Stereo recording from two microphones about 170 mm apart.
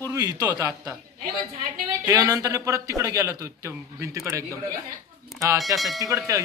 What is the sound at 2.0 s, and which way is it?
Speech, 20° right (ahead or behind).